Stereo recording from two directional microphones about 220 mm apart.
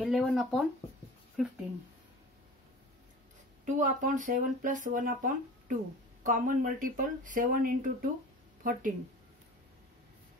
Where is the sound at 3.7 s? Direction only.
35° right (ahead or behind).